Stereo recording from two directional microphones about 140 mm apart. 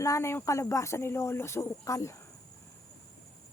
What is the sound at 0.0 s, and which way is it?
Speech, 20° left (ahead or behind).